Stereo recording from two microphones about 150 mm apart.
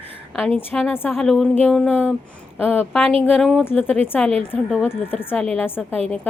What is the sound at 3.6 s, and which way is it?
A woman's voice, 15° left (ahead or behind).